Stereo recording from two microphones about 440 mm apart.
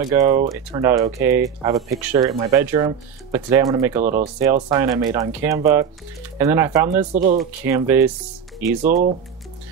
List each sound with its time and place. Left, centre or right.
0.0 s speech: centre
7.1 s speech: centre
7.6 s speech: centre